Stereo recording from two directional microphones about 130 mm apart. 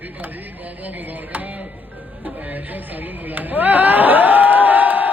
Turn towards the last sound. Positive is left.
turn(degrees=-15)  # may be behind; listen again after turning